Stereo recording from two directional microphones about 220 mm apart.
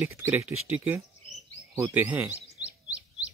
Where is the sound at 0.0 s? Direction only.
10° right (ahead or behind).